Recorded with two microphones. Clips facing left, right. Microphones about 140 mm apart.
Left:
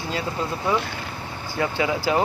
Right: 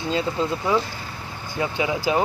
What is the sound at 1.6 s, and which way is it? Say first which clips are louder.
Speech: even; 20° right (ahead or behind).